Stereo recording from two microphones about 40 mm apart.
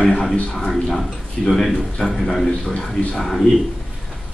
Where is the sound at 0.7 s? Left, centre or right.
Centre.